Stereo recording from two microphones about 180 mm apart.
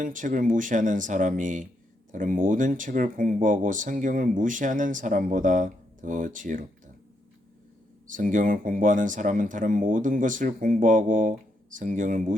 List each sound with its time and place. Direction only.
0.0 s speech: 45° right (ahead or behind)
8.0 s speech: 45° right (ahead or behind)